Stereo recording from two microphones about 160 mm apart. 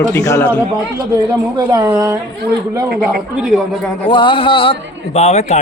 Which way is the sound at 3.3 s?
5° right (ahead or behind).